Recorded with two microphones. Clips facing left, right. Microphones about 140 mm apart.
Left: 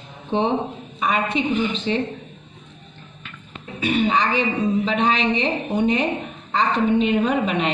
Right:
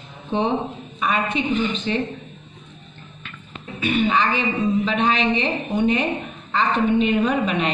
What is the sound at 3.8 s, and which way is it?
A woman's voice, 30° left (ahead or behind).